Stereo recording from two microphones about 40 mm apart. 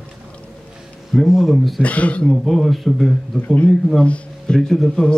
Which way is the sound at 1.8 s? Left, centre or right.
Left.